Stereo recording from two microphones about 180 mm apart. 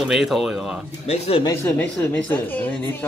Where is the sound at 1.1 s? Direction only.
35° left (ahead or behind).